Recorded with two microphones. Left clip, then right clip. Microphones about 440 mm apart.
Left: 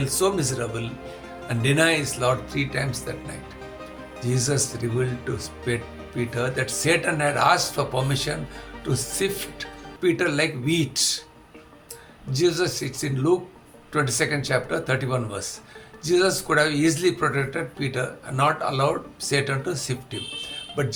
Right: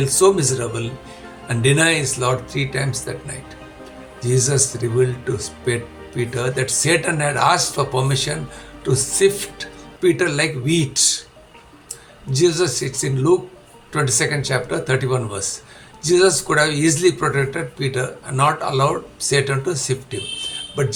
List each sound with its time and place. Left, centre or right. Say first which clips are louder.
0.0 s speech: right 8 dB; left
4.2 s speech: right 6 dB; left
12.3 s speech: right 5 dB; left